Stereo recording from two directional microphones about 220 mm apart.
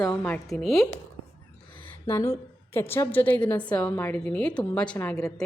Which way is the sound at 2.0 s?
10° left (ahead or behind).